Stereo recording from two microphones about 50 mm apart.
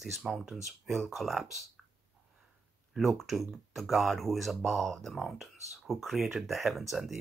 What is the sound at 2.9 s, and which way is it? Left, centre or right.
Speech, centre.